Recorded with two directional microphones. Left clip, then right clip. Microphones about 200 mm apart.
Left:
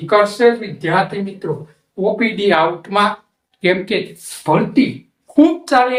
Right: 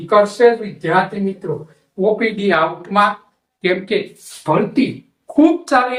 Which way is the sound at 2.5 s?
40° left (ahead or behind).